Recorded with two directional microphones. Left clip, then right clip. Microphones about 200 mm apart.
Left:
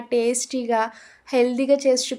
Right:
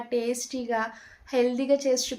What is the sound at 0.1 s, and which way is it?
Speech, 45° left (ahead or behind).